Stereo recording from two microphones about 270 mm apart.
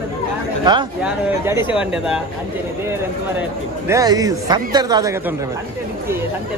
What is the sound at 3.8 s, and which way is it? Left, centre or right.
A man's voice, centre.